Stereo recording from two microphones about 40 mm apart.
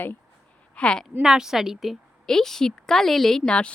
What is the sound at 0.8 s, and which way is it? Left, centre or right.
Speech, left.